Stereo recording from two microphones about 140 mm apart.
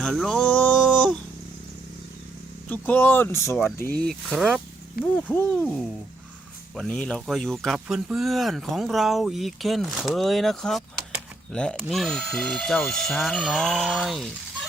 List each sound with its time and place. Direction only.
0.0 s a sound: 5° left (ahead or behind)
2.6 s speech: 15° left (ahead or behind)
4.4 s speech: 5° right (ahead or behind)
5.0 s speech: 90° left
5.3 s speech: 10° left (ahead or behind)